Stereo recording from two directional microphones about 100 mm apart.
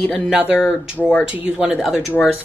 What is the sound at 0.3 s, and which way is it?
A woman's voice, 10° right (ahead or behind).